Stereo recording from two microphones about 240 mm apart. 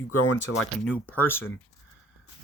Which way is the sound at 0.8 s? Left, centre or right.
Centre.